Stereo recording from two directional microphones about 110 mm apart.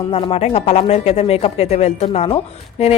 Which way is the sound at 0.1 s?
60° left (ahead or behind).